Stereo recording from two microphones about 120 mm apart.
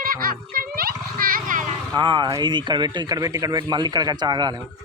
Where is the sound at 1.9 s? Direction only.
35° right (ahead or behind).